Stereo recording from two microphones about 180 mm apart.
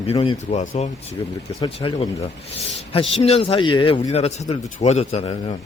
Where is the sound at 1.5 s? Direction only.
30° left (ahead or behind).